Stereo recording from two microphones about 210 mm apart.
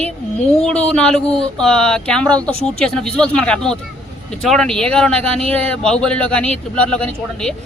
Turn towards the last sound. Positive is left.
turn(degrees=5)  # may be behind; listen again after turning